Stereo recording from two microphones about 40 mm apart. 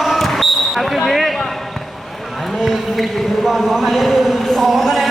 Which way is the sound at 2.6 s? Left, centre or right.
Centre.